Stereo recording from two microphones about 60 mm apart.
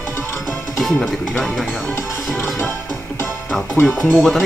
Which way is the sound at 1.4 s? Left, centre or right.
Centre.